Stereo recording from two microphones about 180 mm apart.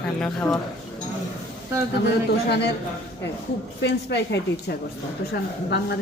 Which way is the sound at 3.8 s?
75° left (ahead or behind).